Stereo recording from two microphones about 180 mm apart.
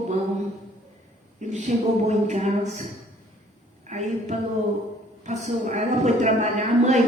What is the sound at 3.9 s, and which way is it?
Speech, 40° right (ahead or behind).